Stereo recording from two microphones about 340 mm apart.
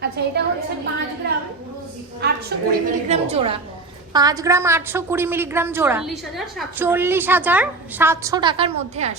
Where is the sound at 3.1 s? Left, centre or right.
Centre.